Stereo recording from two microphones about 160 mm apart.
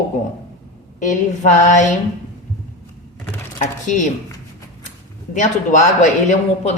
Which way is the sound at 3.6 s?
50° left (ahead or behind).